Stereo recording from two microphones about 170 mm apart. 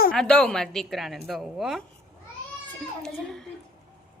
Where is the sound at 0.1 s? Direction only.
5° left (ahead or behind).